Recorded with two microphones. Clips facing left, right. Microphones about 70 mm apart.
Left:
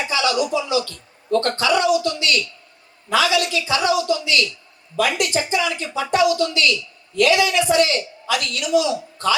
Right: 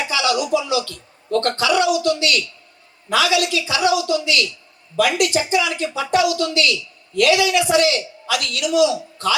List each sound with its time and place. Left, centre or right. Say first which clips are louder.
0.0 s music: even; left
0.7 s a man's voice: even; left